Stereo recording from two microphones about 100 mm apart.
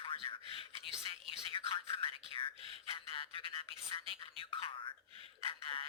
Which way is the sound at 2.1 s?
65° right (ahead or behind).